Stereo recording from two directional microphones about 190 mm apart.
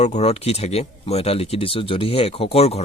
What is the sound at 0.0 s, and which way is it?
Speech, 35° left (ahead or behind).